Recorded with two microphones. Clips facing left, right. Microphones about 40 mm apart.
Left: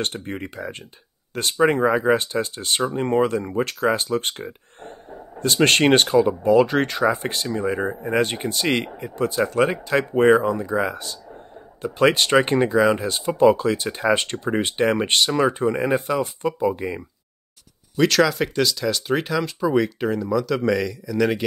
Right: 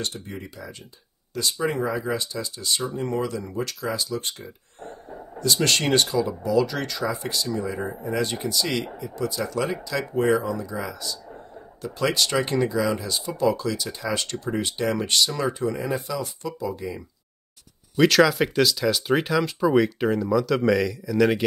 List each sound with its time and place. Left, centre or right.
0.0 s speech: left
17.9 s speech: centre